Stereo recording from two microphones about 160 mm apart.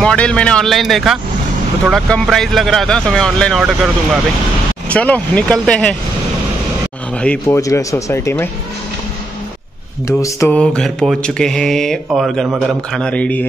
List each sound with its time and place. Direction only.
0.0 s speech: 5° left (ahead or behind)
4.8 s speech: 10° left (ahead or behind)
7.2 s speech: 10° left (ahead or behind)
10.0 s a sound: 20° left (ahead or behind)
10.5 s speech: 5° left (ahead or behind)